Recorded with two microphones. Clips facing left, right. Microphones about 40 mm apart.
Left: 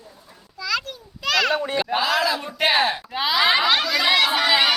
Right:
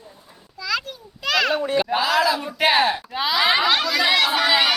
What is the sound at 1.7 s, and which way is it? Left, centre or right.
Speech, centre.